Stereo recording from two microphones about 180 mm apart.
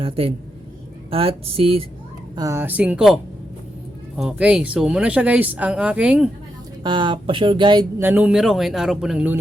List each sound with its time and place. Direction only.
0.0 s speech: 30° right (ahead or behind)
2.3 s speech: 20° right (ahead or behind)
4.2 s speech: 5° right (ahead or behind)
6.8 s speech: 25° right (ahead or behind); by 9.4 s 5° right (ahead or behind)